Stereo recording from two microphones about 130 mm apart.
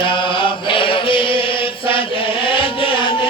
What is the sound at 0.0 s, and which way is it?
Chant, 40° left (ahead or behind).